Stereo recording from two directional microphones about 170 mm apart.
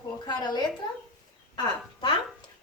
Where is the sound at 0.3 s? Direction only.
25° left (ahead or behind).